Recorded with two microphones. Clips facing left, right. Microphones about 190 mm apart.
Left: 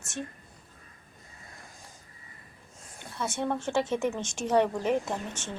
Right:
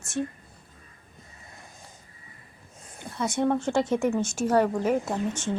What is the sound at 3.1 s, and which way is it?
A woman's voice, 15° right (ahead or behind).